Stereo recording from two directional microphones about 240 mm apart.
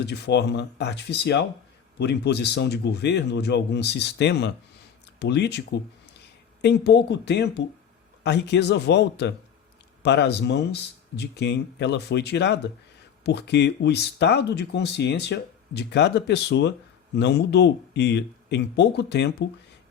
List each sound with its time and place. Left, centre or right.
0.0 s speech: left